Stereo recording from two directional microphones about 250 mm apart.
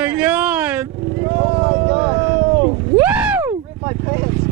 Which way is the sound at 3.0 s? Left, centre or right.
Centre.